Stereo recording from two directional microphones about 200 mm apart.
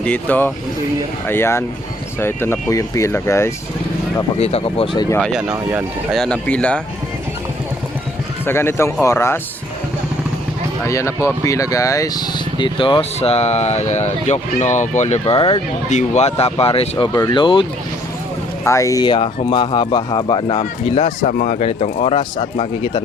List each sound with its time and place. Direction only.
0.0 s speech: 5° left (ahead or behind)
4.4 s speech: 30° left (ahead or behind)
5.2 s speech: 5° right (ahead or behind)
8.4 s speech: 10° left (ahead or behind)
10.8 s speech: 15° left (ahead or behind)